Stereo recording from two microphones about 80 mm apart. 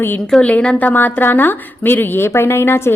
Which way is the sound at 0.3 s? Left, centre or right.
Centre.